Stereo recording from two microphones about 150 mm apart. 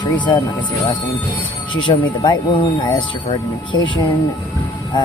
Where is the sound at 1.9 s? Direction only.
35° left (ahead or behind).